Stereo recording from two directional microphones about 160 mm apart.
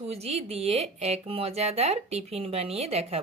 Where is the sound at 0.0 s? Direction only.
40° right (ahead or behind).